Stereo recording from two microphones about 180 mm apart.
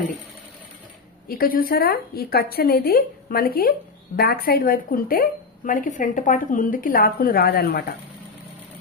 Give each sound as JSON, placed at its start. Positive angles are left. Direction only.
{"t": 1.3, "sound": "a woman's voice", "side_deg": 55}